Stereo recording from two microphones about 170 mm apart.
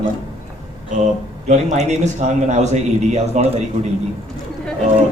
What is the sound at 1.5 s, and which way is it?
A man's voice, 45° right (ahead or behind).